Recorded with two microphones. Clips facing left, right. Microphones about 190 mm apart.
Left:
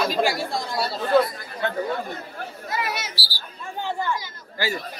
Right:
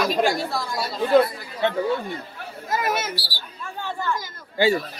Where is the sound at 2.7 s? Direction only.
45° right (ahead or behind).